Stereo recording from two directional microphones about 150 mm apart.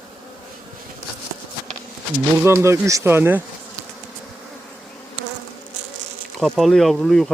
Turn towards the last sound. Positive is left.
turn(degrees=0)  # may be behind; listen again after turning